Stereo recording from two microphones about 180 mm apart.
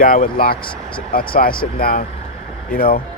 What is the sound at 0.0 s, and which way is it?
Speech, 50° left (ahead or behind).